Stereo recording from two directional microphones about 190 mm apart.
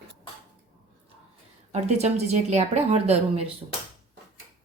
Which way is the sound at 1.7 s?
35° right (ahead or behind).